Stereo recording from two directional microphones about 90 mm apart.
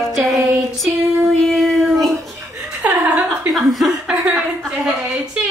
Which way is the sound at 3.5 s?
Centre (ahead or behind).